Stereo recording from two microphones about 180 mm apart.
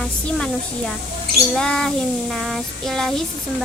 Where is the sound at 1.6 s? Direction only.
5° left (ahead or behind).